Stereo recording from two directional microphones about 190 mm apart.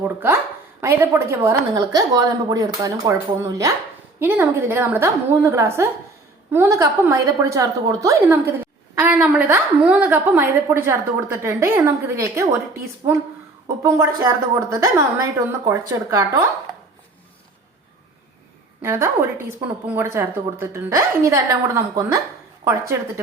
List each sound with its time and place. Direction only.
0.0 s a woman's voice: 10° right (ahead or behind)
18.8 s a woman's voice: 15° right (ahead or behind)